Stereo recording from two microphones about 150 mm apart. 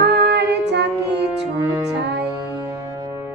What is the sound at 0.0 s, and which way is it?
Female singing, 90° right.